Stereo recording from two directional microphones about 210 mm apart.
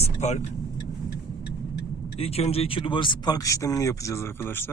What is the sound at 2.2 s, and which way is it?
Speech, 30° left (ahead or behind).